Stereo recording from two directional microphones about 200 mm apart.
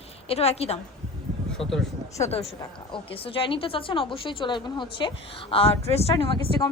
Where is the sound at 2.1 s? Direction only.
35° left (ahead or behind).